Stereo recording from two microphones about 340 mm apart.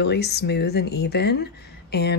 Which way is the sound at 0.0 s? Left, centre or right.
Left.